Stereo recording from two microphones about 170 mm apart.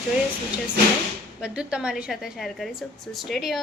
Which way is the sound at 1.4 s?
5° right (ahead or behind).